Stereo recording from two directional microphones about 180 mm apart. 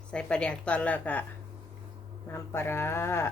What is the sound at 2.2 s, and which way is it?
A woman's voice, 15° left (ahead or behind).